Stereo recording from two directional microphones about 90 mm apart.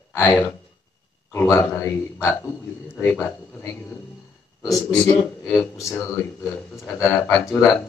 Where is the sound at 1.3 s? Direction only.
30° left (ahead or behind).